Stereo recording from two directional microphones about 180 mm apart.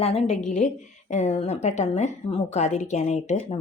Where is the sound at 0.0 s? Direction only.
35° left (ahead or behind).